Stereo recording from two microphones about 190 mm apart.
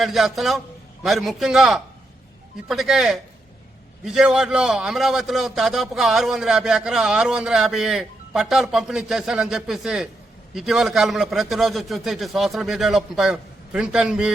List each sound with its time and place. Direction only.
0.0 s a man's voice: centre (ahead or behind)